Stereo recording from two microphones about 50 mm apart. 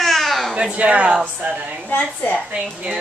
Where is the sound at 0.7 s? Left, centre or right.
Right.